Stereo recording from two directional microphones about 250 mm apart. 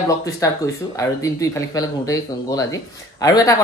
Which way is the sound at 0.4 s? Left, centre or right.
Centre.